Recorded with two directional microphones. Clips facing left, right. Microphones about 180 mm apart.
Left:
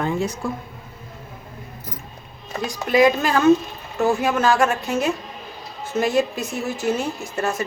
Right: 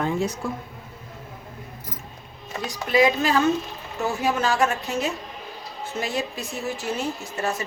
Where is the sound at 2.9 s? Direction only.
50° left (ahead or behind).